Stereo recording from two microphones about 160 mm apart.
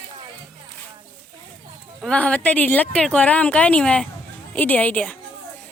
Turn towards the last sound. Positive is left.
turn(degrees=5)  # may be behind; listen again after turning